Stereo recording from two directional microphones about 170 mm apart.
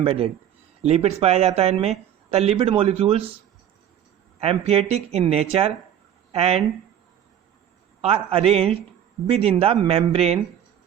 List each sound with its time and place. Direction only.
0.0 s speech: 35° right (ahead or behind)
4.4 s speech: 35° right (ahead or behind)
8.0 s speech: 35° right (ahead or behind)